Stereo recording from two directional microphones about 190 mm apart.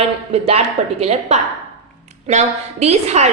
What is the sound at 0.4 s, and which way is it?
A woman's voice, 35° right (ahead or behind).